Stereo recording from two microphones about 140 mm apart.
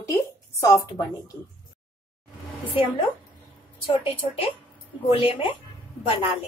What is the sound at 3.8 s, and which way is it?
A woman's voice, 40° left (ahead or behind).